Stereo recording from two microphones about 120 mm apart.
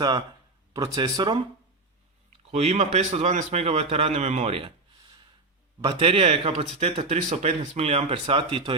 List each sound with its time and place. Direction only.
0.7 s speech: 30° right (ahead or behind)
2.5 s speech: 65° right (ahead or behind)